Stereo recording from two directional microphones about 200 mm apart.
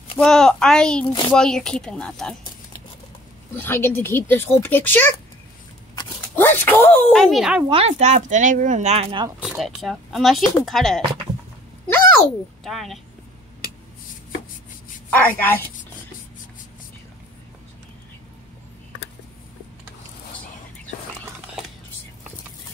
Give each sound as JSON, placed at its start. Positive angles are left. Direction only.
{"t": 0.2, "sound": "speech", "side_deg": 5}
{"t": 3.5, "sound": "speech", "side_deg": 10}
{"t": 6.3, "sound": "speech", "side_deg": 10}
{"t": 7.6, "sound": "speech", "side_deg": -30}
{"t": 9.4, "sound": "speech", "side_deg": 0}
{"t": 12.6, "sound": "speech", "side_deg": 0}
{"t": 15.0, "sound": "a woman's voice", "side_deg": 10}